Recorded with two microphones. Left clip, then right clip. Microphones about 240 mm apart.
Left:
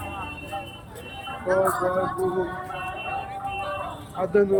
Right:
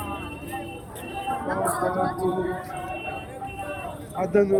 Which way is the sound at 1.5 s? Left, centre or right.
Centre.